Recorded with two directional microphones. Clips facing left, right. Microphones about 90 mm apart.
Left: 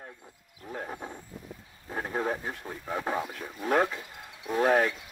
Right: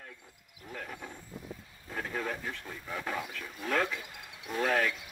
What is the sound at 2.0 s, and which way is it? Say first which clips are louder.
A man's voice: left 5 dB; 30° left (ahead or behind).